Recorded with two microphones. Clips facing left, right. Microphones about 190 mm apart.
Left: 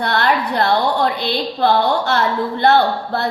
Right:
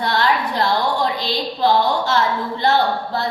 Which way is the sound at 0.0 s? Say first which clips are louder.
Left 1 dB; 60° left (ahead or behind).